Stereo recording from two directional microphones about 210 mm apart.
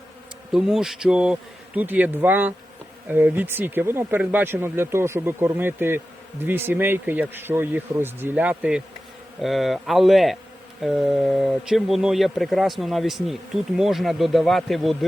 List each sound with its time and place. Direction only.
0.5 s speech: centre (ahead or behind)